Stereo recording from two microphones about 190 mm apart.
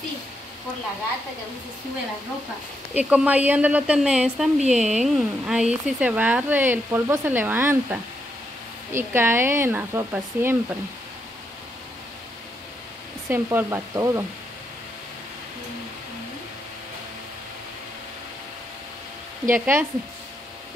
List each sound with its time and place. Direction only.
2.9 s speech: 10° right (ahead or behind)
4.6 s a woman's voice: 35° right (ahead or behind)
4.9 s speech: 5° right (ahead or behind)
13.3 s speech: 10° right (ahead or behind)
19.5 s speech: 10° right (ahead or behind)